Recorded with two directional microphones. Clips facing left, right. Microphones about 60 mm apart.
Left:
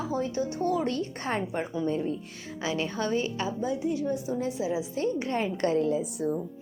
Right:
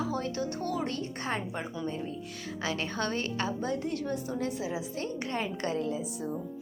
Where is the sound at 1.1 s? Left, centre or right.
Left.